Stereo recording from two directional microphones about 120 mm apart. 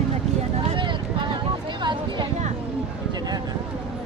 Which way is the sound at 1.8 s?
40° right (ahead or behind).